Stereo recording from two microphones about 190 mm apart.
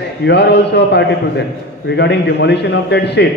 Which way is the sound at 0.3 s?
65° left (ahead or behind).